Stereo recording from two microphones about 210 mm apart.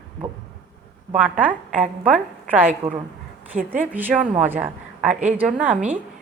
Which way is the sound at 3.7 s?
10° right (ahead or behind).